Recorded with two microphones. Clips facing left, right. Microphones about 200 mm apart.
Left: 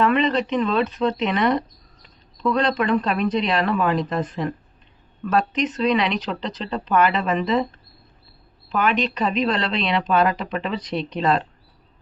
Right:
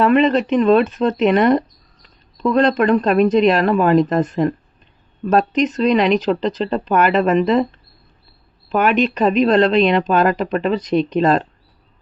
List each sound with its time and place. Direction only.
0.0 s speech: 45° right (ahead or behind)
8.7 s speech: 50° right (ahead or behind)